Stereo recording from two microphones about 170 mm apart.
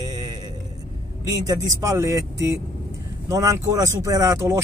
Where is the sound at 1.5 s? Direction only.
20° right (ahead or behind).